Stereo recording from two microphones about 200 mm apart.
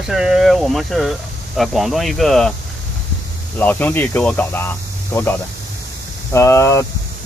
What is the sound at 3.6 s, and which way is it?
Speech, 10° left (ahead or behind).